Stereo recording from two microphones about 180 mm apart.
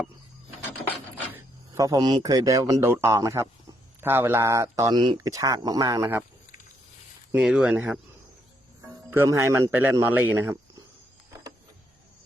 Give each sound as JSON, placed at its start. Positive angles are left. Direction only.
{"t": 1.3, "sound": "speech", "side_deg": -15}
{"t": 7.3, "sound": "speech", "side_deg": -5}
{"t": 9.1, "sound": "speech", "side_deg": -15}